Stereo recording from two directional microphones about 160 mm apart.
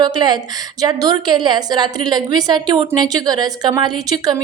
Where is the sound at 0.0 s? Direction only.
25° right (ahead or behind).